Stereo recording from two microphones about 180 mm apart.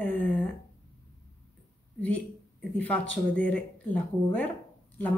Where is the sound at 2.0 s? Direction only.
10° left (ahead or behind).